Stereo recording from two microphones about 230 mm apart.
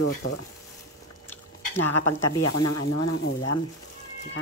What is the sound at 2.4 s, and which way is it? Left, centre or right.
Speech, left.